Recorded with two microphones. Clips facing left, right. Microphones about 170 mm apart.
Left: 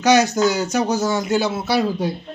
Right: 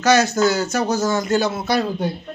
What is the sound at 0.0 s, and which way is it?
Speech, 15° left (ahead or behind).